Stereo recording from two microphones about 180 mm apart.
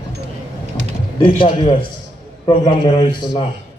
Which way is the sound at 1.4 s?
30° left (ahead or behind).